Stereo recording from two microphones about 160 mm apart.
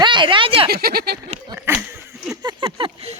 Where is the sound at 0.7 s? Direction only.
75° right (ahead or behind).